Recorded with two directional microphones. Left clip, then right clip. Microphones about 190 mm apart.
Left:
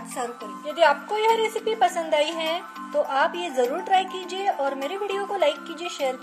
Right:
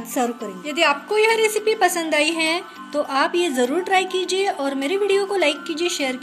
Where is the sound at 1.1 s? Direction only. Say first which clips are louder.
Right 4 dB; 15° left (ahead or behind).